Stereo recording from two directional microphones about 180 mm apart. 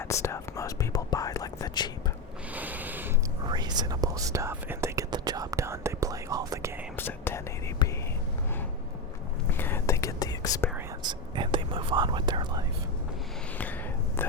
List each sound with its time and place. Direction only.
0.0 s whispering: 15° left (ahead or behind)
2.5 s rub: 10° right (ahead or behind)
3.4 s whispering: 25° right (ahead or behind)
6.9 s whispering: 10° left (ahead or behind)
7.8 s whispering: 25° left (ahead or behind)
9.5 s whispering: 10° left (ahead or behind)
11.0 s whispering: 25° right (ahead or behind)
14.2 s whispering: 10° left (ahead or behind)